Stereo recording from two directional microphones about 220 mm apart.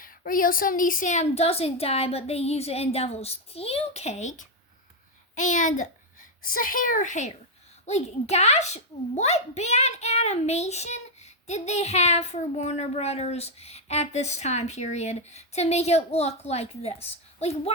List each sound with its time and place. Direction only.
0.0 s a child's voice: 40° left (ahead or behind)